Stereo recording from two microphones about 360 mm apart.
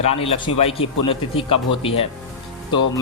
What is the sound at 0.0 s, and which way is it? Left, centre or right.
A man's voice, centre.